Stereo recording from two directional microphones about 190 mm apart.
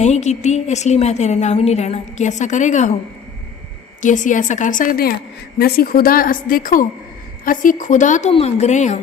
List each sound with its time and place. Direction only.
0.0 s a woman's voice: 35° left (ahead or behind)
4.0 s a woman's voice: 40° left (ahead or behind)